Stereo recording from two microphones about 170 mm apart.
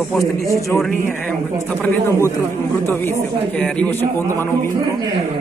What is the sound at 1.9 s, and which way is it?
Speech, 15° left (ahead or behind).